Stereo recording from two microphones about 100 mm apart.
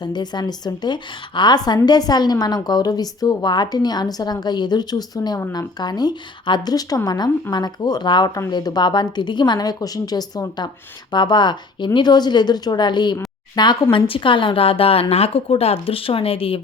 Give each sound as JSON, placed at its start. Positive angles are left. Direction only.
{"t": 0.0, "sound": "a woman's voice", "side_deg": 45}
{"t": 13.9, "sound": "a woman's voice", "side_deg": 60}